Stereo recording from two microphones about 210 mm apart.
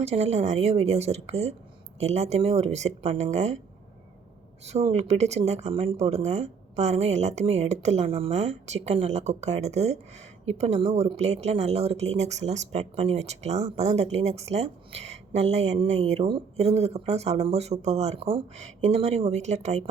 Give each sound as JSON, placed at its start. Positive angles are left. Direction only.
{"t": 0.0, "sound": "speech", "side_deg": -30}
{"t": 4.9, "sound": "speech", "side_deg": -30}